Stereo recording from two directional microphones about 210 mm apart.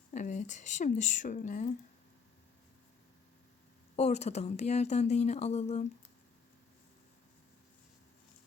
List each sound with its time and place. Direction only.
0.1 s speech: 35° left (ahead or behind)
3.9 s speech: 30° left (ahead or behind)